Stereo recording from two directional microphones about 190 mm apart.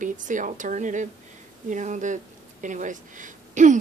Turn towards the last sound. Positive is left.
turn(degrees=-40)  # may be behind; listen again after turning